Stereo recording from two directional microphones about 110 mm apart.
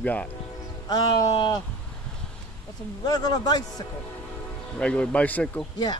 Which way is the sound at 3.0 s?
40° left (ahead or behind).